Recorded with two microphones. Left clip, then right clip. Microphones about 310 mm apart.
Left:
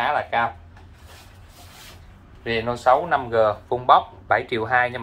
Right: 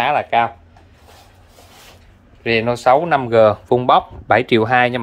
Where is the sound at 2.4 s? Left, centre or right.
Right.